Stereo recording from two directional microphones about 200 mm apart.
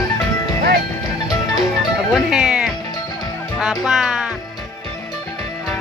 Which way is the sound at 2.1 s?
5° right (ahead or behind).